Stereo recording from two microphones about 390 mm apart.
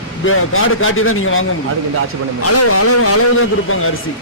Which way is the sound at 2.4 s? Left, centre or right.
Left.